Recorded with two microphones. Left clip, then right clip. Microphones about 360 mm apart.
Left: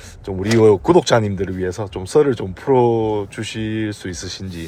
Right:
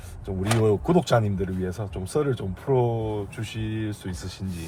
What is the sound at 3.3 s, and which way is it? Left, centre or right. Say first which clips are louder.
Speech: left 9 dB; left.